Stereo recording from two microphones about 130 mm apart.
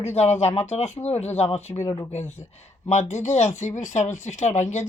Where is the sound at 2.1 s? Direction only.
60° left (ahead or behind).